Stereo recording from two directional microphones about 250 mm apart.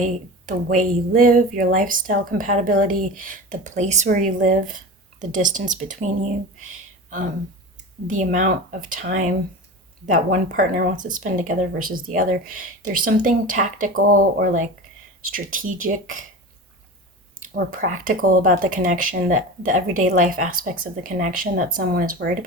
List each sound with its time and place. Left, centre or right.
0.0 s speech: right
8.0 s speech: right
17.5 s speech: right